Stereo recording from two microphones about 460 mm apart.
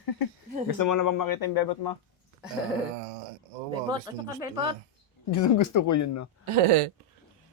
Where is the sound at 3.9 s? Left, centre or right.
Centre.